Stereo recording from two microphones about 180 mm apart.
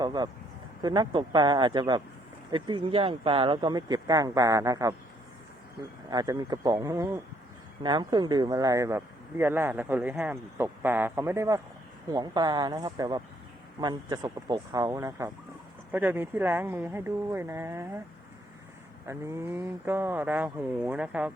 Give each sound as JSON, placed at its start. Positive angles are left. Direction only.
{"t": 0.0, "sound": "speech", "side_deg": -25}
{"t": 6.1, "sound": "speech", "side_deg": -20}
{"t": 19.0, "sound": "speech", "side_deg": -15}